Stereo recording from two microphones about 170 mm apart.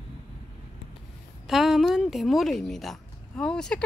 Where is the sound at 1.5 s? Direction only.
Centre (ahead or behind).